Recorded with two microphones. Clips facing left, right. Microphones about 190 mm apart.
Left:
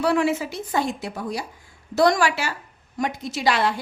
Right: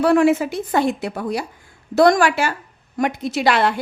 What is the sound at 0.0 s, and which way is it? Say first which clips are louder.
A woman's voice: right 6 dB; 50° right (ahead or behind).